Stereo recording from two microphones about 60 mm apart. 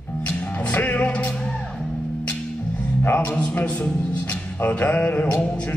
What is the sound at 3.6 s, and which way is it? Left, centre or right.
Music, left.